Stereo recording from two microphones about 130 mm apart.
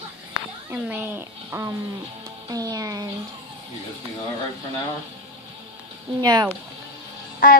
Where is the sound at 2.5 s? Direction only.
30° right (ahead or behind).